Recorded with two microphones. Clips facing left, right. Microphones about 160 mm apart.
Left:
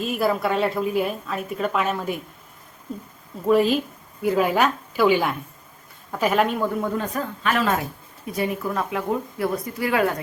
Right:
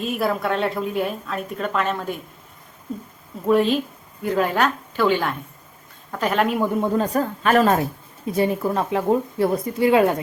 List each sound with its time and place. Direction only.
0.0 s a woman's voice: centre (ahead or behind)
3.4 s a woman's voice: centre (ahead or behind)
6.6 s speech: 20° right (ahead or behind); by 7.8 s 40° right (ahead or behind)
8.3 s speech: 30° right (ahead or behind)